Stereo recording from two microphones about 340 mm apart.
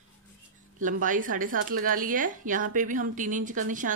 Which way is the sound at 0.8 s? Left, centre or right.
Right.